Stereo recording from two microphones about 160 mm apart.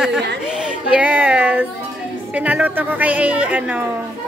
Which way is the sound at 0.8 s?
10° right (ahead or behind).